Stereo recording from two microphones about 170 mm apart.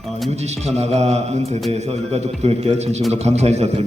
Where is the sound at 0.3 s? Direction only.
40° right (ahead or behind).